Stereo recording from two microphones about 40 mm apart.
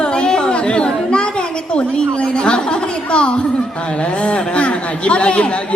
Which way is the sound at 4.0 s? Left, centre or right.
Left.